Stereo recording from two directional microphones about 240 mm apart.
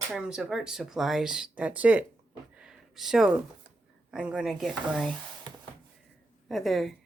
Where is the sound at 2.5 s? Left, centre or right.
Centre.